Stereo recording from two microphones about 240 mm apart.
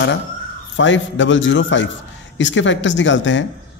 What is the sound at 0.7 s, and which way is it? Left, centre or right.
A man's voice, left.